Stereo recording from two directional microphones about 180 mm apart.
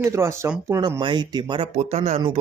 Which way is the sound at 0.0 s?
15° right (ahead or behind).